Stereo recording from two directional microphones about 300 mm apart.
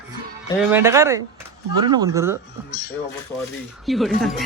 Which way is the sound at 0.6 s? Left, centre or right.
Centre.